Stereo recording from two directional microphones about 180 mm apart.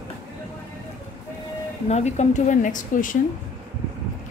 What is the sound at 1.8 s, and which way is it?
Speech, 40° left (ahead or behind).